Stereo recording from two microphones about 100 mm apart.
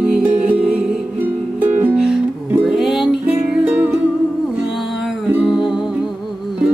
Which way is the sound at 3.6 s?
20° right (ahead or behind).